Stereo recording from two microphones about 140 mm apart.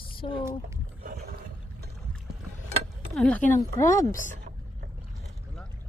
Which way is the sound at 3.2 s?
10° left (ahead or behind).